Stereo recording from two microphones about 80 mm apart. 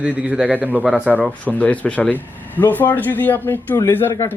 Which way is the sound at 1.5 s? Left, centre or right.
Centre.